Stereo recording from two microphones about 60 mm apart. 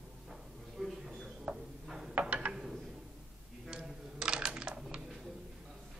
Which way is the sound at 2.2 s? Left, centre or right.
Centre.